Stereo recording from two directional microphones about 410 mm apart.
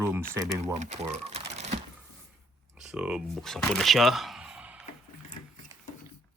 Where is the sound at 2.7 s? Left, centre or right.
Centre.